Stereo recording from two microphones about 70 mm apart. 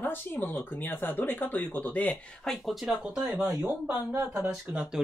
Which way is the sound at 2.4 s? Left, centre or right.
Centre.